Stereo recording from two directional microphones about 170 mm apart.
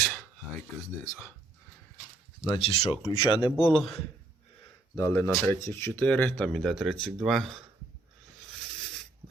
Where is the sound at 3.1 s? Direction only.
30° left (ahead or behind).